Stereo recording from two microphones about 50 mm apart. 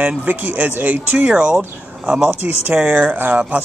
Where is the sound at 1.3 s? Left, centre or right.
Centre.